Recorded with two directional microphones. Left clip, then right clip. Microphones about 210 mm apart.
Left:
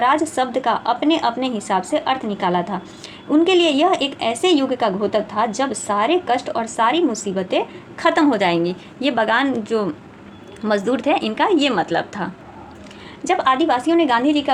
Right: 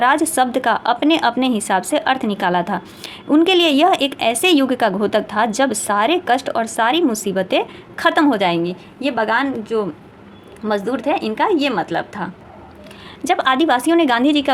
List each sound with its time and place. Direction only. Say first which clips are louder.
0.0 s a woman's voice: right 2 dB; 35° right (ahead or behind); by 8.7 s 10° right (ahead or behind)
9.0 s a woman's voice: even; centre (ahead or behind)
13.2 s a woman's voice: right 1 dB; 25° right (ahead or behind)